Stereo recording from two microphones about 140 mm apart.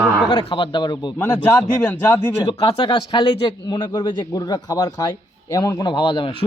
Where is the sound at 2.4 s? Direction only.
35° left (ahead or behind).